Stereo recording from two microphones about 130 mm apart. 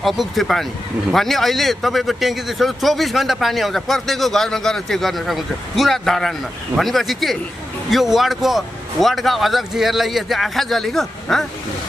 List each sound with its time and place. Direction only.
0.0 s a man's voice: centre (ahead or behind)